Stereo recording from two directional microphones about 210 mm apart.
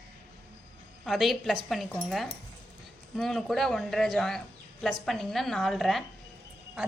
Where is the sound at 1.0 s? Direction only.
Centre (ahead or behind).